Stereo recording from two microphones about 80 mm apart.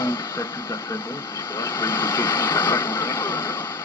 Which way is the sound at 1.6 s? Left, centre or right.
Left.